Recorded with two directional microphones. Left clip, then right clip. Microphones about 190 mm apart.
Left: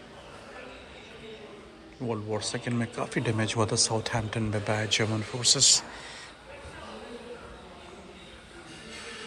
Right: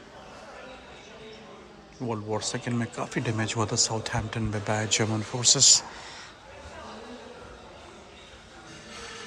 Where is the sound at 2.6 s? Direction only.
10° right (ahead or behind).